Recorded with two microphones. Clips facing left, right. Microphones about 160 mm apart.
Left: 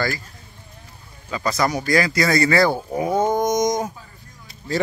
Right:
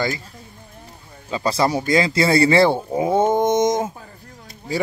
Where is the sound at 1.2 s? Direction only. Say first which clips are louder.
Right 2 dB; 30° right (ahead or behind).